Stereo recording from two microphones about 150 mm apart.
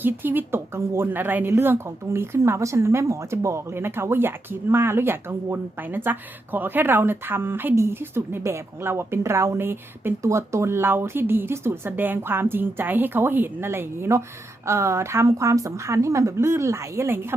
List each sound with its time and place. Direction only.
0.0 s a woman's voice: 15° right (ahead or behind)